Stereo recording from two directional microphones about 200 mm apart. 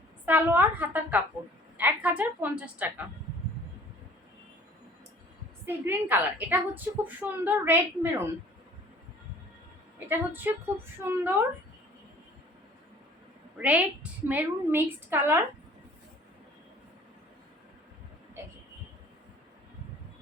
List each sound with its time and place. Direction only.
0.3 s a woman's voice: 10° right (ahead or behind)
5.6 s a woman's voice: 10° right (ahead or behind)
10.1 s a woman's voice: 10° right (ahead or behind)
13.6 s a woman's voice: 5° right (ahead or behind)
18.4 s vehicle: 10° right (ahead or behind)